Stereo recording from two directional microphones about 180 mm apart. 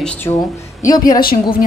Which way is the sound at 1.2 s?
55° left (ahead or behind).